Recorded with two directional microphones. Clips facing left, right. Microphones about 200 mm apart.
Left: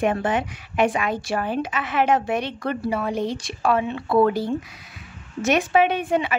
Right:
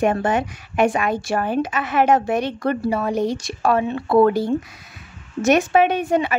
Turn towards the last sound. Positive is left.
turn(degrees=-45)  # may be behind; listen again after turning